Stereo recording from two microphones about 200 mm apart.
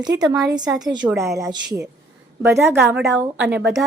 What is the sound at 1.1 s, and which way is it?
Speech, centre (ahead or behind).